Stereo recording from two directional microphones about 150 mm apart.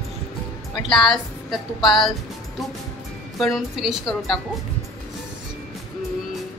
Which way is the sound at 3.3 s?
Centre (ahead or behind).